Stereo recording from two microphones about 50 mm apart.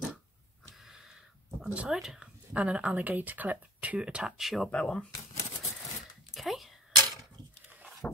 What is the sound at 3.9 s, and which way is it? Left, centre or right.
Speech, centre.